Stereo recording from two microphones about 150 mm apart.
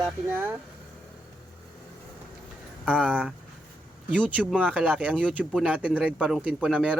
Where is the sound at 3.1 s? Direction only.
10° right (ahead or behind).